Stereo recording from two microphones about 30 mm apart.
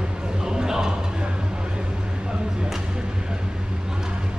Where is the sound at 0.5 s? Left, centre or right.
Right.